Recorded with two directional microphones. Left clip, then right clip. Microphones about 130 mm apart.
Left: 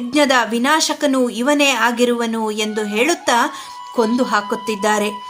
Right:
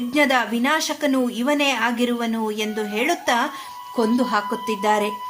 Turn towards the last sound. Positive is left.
turn(degrees=25)  # may be behind; listen again after turning